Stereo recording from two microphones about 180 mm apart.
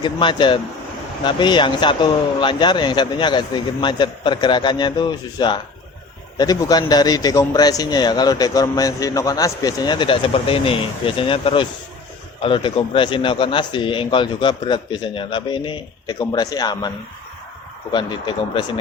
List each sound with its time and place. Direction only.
0.0 s a man's voice: 25° left (ahead or behind)
17.9 s a man's voice: 25° left (ahead or behind)